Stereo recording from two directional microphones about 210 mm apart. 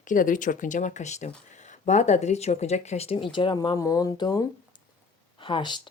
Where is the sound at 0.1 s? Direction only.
40° left (ahead or behind).